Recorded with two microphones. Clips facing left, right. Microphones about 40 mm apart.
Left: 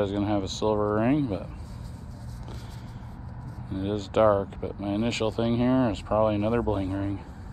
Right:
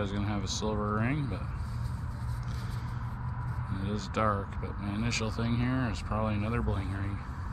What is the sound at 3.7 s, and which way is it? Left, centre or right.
Speech, left.